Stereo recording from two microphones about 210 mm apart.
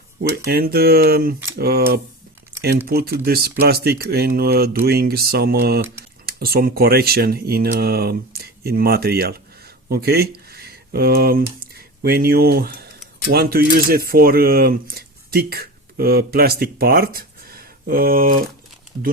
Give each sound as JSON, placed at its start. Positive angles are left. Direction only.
{"t": 0.4, "sound": "speech", "side_deg": -45}